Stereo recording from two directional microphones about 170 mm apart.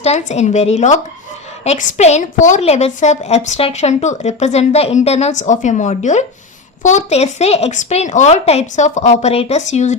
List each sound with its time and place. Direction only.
0.0 s a woman's voice: 40° left (ahead or behind)